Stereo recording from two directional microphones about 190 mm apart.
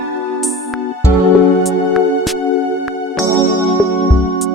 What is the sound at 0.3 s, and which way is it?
Music, centre (ahead or behind).